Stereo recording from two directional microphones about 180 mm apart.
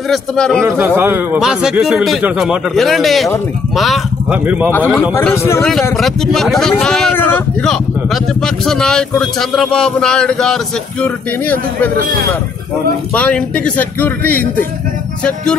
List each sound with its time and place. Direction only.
0.1 s speech: 5° left (ahead or behind)
0.7 s speech: 10° right (ahead or behind)
5.1 s speech: 15° left (ahead or behind)
5.6 s speech: centre (ahead or behind)
13.1 s speech: 5° left (ahead or behind)